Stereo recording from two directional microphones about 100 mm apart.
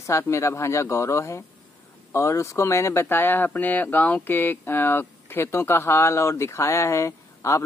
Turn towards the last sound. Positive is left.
turn(degrees=30)  # may be behind; listen again after turning